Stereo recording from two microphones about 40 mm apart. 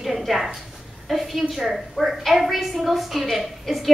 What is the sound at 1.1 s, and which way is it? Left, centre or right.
A woman's voice, centre.